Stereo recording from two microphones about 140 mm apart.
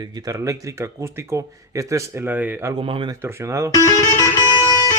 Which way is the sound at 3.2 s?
20° right (ahead or behind).